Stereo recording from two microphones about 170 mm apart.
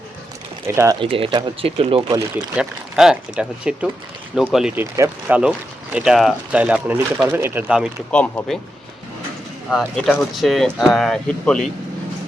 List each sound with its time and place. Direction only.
0.9 s speech: 35° right (ahead or behind)
2.6 s speech: 5° right (ahead or behind)
4.8 s speech: 15° right (ahead or behind)
8.1 s speech: 5° left (ahead or behind)
9.6 s speech: 5° left (ahead or behind)